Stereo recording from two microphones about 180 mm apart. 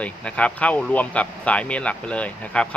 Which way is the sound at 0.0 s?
5° left (ahead or behind).